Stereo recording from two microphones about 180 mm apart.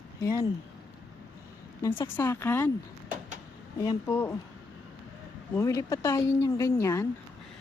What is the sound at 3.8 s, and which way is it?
Speech, 15° left (ahead or behind).